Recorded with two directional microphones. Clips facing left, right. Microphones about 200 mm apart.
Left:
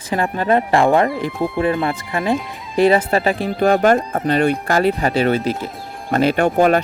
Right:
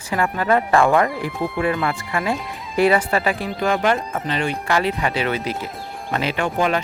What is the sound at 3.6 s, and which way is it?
Speech, 45° left (ahead or behind).